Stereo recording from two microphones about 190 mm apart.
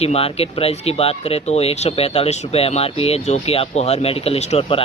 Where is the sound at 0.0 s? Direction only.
30° left (ahead or behind).